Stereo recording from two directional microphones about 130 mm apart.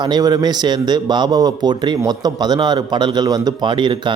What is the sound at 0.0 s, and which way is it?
A man's voice, 30° right (ahead or behind).